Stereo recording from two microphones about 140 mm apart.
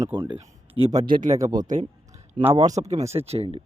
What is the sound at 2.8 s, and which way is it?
Speech, 55° right (ahead or behind).